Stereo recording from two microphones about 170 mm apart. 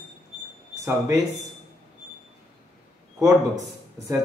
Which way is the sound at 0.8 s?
15° right (ahead or behind).